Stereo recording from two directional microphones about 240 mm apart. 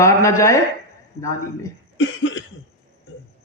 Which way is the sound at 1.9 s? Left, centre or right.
Left.